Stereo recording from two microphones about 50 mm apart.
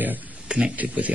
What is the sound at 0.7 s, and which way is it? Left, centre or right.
Speech, right.